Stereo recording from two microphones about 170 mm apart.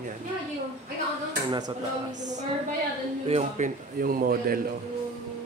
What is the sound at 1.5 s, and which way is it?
Speech, 25° right (ahead or behind).